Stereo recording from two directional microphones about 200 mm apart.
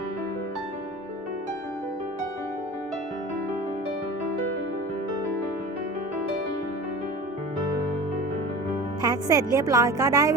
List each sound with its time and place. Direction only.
9.0 s a woman's voice: 20° right (ahead or behind)